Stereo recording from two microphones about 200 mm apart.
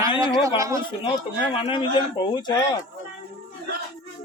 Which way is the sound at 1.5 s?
25° left (ahead or behind).